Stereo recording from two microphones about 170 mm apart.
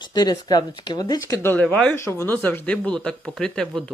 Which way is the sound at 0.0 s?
25° left (ahead or behind).